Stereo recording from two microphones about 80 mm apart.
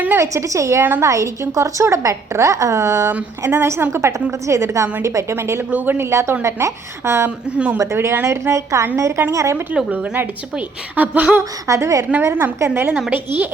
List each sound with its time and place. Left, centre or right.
0.2 s a woman's voice: right
0.8 s a woman's voice: right
1.0 s a woman's voice: right
9.7 s a woman's voice: centre
11.3 s a woman's voice: right
12.2 s a woman's voice: right
12.9 s speech: centre